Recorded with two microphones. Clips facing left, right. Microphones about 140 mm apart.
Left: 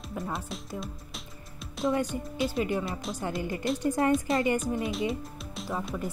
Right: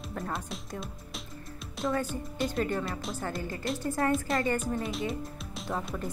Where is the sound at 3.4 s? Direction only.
20° left (ahead or behind).